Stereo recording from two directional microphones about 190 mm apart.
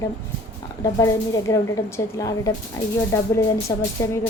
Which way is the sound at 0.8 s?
20° left (ahead or behind).